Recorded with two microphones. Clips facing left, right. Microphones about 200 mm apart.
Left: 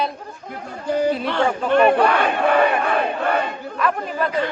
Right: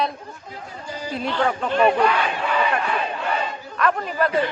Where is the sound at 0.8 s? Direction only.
60° left (ahead or behind).